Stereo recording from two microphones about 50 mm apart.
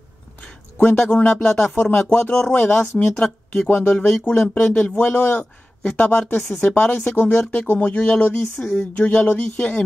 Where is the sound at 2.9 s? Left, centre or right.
Centre.